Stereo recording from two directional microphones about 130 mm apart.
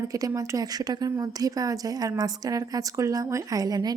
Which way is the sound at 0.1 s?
25° right (ahead or behind).